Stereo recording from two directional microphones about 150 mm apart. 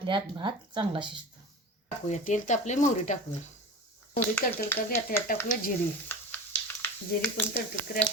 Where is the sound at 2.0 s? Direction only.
50° left (ahead or behind).